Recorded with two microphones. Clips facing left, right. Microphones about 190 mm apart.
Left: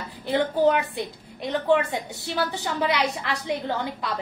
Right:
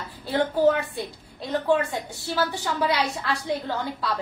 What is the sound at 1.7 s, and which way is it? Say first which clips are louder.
A woman's voice: left 2 dB; 20° left (ahead or behind).